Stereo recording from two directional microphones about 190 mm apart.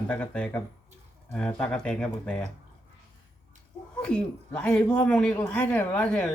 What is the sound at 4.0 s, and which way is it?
Speech, 5° left (ahead or behind).